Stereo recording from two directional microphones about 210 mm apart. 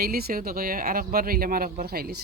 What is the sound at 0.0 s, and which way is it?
Speech, 45° right (ahead or behind).